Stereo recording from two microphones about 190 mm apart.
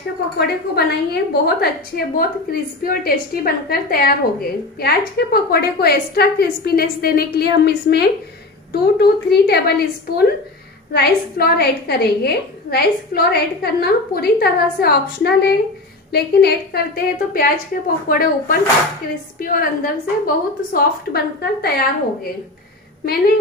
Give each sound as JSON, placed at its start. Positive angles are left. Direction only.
{"t": 0.4, "sound": "a woman's voice", "side_deg": 60}